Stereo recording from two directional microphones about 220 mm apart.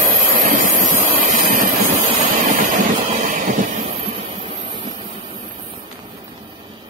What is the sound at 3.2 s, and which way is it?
Vehicle, 35° right (ahead or behind).